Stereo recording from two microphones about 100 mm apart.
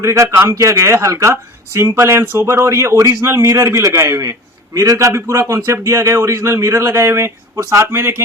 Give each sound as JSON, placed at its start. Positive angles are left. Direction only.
{"t": 0.0, "sound": "speech", "side_deg": -30}